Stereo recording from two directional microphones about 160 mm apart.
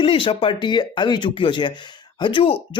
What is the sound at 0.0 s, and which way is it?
Speech, 30° left (ahead or behind).